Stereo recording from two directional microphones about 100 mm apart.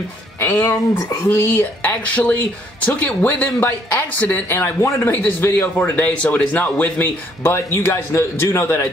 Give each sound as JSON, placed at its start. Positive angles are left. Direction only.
{"t": 0.4, "sound": "speech", "side_deg": 25}